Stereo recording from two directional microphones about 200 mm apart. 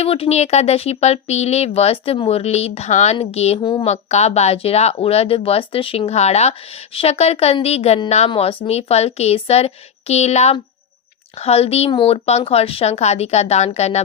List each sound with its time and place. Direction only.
0.0 s speech: 30° left (ahead or behind)